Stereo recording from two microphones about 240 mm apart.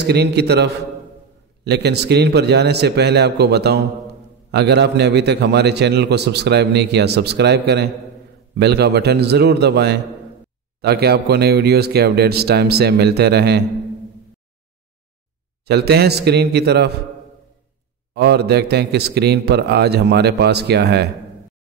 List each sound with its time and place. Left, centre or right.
0.0 s a man's voice: right
15.6 s a man's voice: right
18.1 s a man's voice: right